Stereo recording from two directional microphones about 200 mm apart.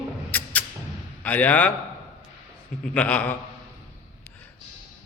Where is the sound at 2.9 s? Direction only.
5° left (ahead or behind).